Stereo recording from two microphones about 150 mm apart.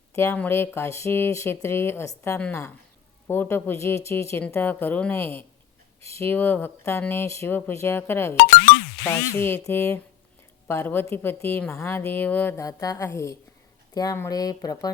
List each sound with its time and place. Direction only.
0.1 s speech: 15° left (ahead or behind)